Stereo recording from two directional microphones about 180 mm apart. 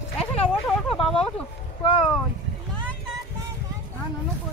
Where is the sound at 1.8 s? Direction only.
30° left (ahead or behind).